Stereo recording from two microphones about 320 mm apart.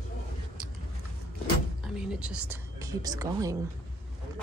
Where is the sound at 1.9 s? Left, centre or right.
Centre.